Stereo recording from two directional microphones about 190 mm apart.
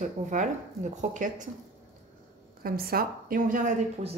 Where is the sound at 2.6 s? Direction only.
50° right (ahead or behind).